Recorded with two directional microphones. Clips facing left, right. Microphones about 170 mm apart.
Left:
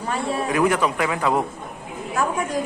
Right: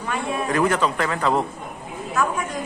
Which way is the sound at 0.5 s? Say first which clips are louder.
Even; 10° left (ahead or behind).